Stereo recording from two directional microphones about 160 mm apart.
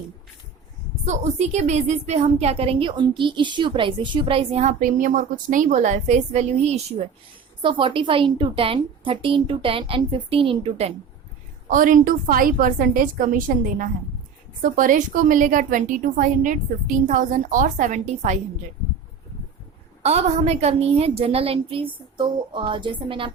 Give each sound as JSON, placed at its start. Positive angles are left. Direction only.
{"t": 1.0, "sound": "a woman's voice", "side_deg": -45}
{"t": 4.8, "sound": "a woman's voice", "side_deg": -55}
{"t": 7.6, "sound": "a woman's voice", "side_deg": -30}
{"t": 11.7, "sound": "a woman's voice", "side_deg": -60}
{"t": 20.0, "sound": "a woman's voice", "side_deg": -40}